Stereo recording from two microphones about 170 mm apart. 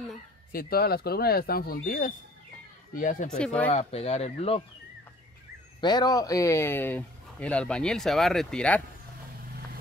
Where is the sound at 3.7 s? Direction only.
35° left (ahead or behind).